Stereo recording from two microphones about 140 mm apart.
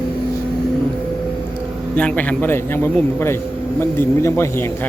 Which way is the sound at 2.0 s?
10° left (ahead or behind).